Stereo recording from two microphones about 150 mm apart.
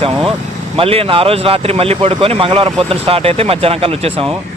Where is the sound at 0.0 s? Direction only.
35° right (ahead or behind).